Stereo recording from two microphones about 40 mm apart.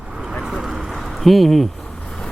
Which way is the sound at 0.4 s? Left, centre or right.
Centre.